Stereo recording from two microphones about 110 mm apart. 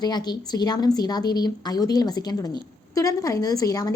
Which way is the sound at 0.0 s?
40° left (ahead or behind).